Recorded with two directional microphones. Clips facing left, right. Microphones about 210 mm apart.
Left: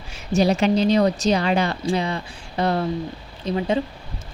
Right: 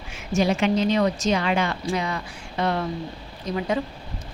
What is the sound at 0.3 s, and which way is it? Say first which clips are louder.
A woman's voice: left 3 dB; 35° left (ahead or behind).